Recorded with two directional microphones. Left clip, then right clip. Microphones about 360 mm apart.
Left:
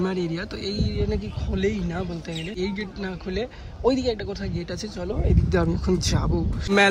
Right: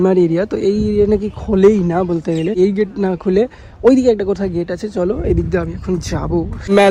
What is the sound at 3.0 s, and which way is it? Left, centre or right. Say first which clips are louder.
Speech: right 15 dB; right.